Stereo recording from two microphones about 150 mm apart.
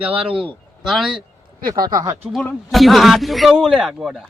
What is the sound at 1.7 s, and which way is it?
Speech, 25° right (ahead or behind).